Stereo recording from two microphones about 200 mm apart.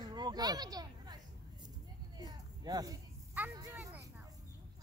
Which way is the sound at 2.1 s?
20° right (ahead or behind).